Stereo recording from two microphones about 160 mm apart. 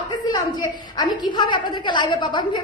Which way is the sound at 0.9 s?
25° left (ahead or behind).